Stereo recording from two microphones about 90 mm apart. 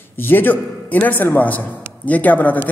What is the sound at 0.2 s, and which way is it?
A man's voice, 20° left (ahead or behind).